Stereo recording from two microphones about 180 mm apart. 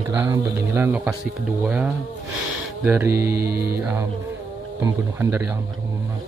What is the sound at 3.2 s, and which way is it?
Mantra, 60° right (ahead or behind).